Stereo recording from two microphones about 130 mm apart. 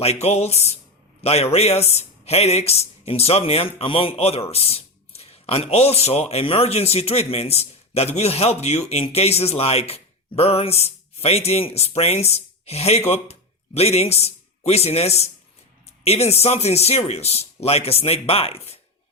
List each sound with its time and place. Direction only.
0.0 s a man's voice: 55° left (ahead or behind)